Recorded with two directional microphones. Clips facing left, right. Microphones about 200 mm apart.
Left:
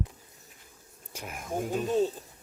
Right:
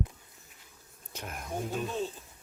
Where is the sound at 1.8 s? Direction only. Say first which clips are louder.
Left 9 dB; 40° left (ahead or behind).